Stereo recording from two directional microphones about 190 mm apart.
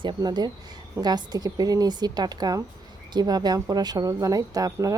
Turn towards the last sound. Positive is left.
turn(degrees=-15)  # may be behind; listen again after turning